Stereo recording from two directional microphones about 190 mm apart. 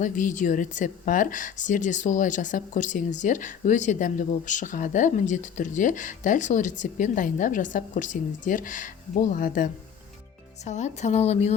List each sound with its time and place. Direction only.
0.0 s a woman's voice: 40° left (ahead or behind)